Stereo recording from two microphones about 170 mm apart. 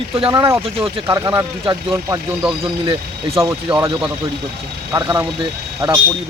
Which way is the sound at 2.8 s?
35° right (ahead or behind).